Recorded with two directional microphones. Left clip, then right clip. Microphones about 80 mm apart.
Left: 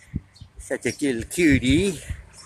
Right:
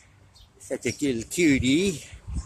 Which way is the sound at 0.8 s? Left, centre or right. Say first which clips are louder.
Left 2 dB; centre.